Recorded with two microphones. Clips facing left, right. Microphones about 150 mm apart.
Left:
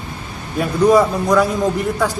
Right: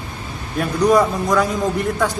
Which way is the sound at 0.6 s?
5° left (ahead or behind).